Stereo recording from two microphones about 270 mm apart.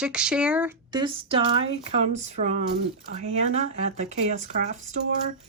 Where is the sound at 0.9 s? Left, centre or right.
Centre.